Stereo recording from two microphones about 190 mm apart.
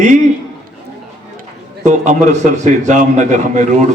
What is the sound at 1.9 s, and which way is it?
A man's voice, 40° right (ahead or behind).